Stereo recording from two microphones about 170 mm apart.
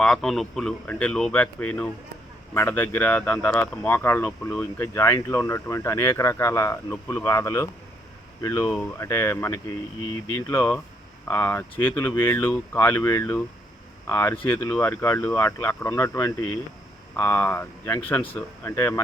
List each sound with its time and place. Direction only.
0.0 s speech: centre (ahead or behind); by 8.6 s 20° left (ahead or behind)
8.6 s speech: 5° left (ahead or behind)
9.0 s speech: 15° left (ahead or behind)